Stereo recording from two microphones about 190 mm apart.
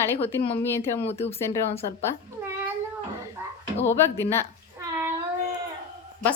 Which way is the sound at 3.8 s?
15° left (ahead or behind).